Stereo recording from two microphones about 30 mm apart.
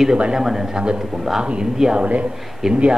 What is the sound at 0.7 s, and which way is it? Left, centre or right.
Speech, right.